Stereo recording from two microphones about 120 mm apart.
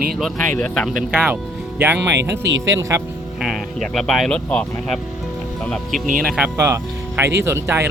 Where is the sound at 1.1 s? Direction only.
10° right (ahead or behind).